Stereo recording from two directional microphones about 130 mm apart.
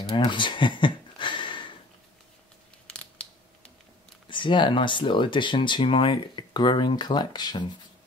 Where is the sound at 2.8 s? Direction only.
10° left (ahead or behind).